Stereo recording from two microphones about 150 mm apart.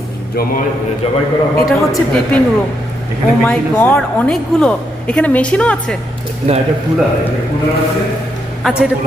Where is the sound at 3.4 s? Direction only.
10° left (ahead or behind).